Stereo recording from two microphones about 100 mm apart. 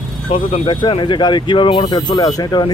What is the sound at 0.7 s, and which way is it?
Speech, 55° left (ahead or behind).